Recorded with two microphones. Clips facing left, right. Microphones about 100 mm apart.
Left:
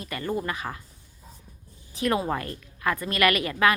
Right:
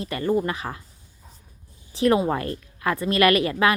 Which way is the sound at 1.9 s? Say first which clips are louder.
Right 5 dB; 25° right (ahead or behind).